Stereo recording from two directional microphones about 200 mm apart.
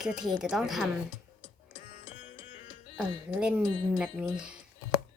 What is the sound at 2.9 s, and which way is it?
Speech, 5° right (ahead or behind).